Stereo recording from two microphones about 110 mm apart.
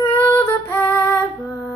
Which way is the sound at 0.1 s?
20° left (ahead or behind).